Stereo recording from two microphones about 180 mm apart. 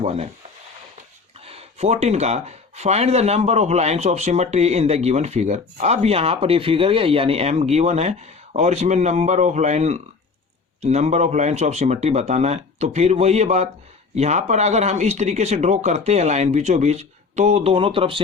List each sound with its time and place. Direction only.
0.0 s speech: 35° right (ahead or behind)
1.5 s speech: 35° right (ahead or behind)